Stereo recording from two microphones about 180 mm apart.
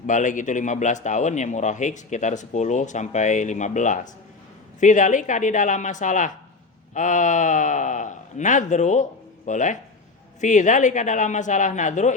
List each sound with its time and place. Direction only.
0.1 s a man's voice: 45° left (ahead or behind)